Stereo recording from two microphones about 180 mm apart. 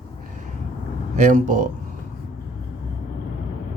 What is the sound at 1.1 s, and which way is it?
Speech, 45° right (ahead or behind).